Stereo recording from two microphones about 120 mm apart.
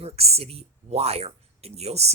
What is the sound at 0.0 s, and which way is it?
Speech, 60° right (ahead or behind).